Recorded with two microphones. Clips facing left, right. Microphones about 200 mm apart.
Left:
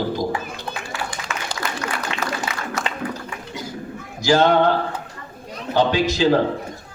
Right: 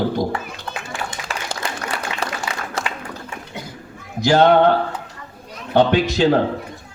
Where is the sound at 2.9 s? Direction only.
25° left (ahead or behind).